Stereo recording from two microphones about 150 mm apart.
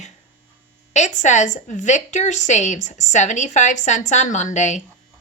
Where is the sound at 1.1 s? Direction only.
55° left (ahead or behind).